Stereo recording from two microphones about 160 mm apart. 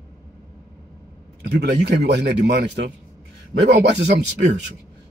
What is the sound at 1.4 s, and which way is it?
Speech, 90° right.